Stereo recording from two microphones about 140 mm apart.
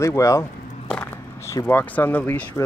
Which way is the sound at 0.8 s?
5° left (ahead or behind).